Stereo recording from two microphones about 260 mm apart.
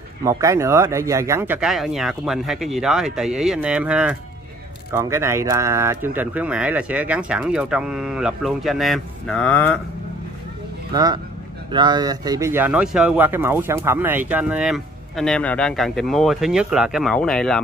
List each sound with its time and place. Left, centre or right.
0.2 s speech: centre
10.9 s a man's voice: centre